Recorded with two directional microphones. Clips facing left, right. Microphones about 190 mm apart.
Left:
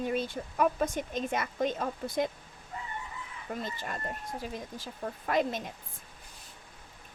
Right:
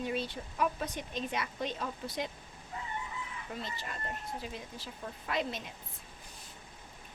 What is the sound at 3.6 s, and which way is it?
Speech, 50° left (ahead or behind).